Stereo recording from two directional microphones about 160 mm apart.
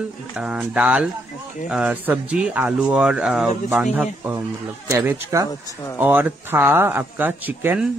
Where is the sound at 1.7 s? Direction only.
10° right (ahead or behind).